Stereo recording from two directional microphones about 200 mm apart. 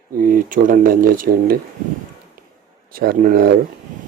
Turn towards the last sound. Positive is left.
turn(degrees=-45)  # may be behind; listen again after turning